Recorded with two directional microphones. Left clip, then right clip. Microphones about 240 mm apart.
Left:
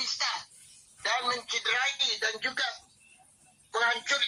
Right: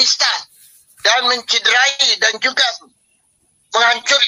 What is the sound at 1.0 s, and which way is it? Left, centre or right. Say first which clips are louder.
Speech: right 15 dB; right.